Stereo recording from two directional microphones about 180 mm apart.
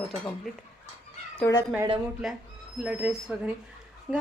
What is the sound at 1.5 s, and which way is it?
Speech, 15° left (ahead or behind).